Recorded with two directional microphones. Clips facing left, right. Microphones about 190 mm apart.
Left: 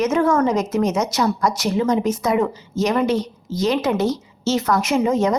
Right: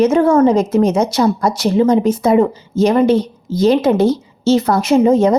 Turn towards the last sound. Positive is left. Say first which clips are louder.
# right 7 dB
turn(degrees=-30)  # may be behind; listen again after turning